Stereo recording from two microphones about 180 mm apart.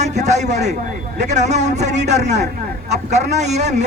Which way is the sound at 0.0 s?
40° right (ahead or behind).